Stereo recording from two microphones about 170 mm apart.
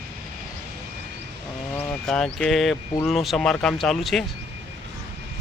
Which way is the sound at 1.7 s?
5° left (ahead or behind).